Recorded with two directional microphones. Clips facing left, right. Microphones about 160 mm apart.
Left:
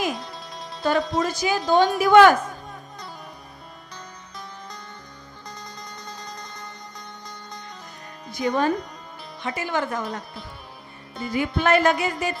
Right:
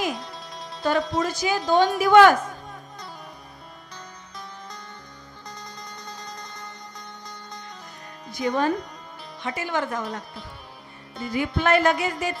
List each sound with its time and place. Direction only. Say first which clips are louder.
0.0 s speech: left 1 dB; 10° left (ahead or behind)
2.4 s music: left 1 dB; 20° left (ahead or behind)
3.9 s music: left 1 dB; 5° left (ahead or behind)
8.3 s speech: left 1 dB; 10° left (ahead or behind)